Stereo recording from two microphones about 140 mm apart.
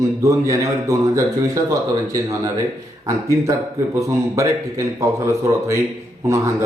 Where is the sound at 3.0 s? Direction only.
20° right (ahead or behind).